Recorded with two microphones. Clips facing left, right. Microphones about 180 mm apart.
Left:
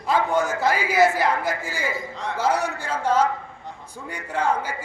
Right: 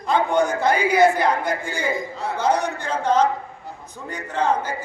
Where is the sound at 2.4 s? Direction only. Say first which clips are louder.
Right 2 dB; 5° left (ahead or behind).